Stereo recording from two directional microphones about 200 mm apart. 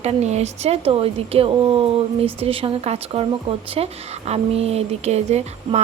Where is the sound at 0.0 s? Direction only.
35° right (ahead or behind).